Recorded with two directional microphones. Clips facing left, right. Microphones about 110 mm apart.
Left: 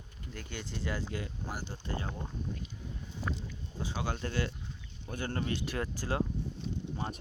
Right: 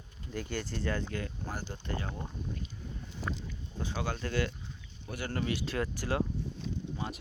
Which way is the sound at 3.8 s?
15° left (ahead or behind).